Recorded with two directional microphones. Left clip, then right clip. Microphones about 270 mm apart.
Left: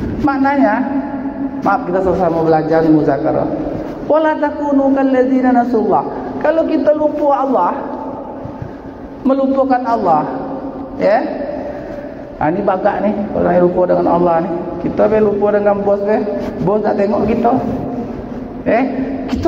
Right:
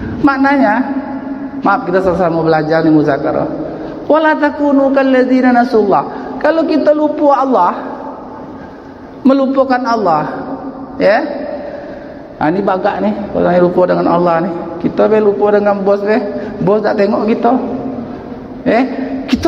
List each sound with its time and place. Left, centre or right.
0.2 s a man's voice: right
9.2 s a man's voice: right
12.4 s a man's voice: right